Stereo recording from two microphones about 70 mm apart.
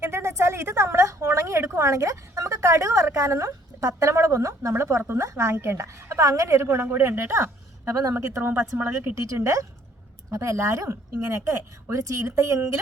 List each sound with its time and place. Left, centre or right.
0.0 s a woman's voice: right
8.1 s speech: right
9.1 s a woman's voice: right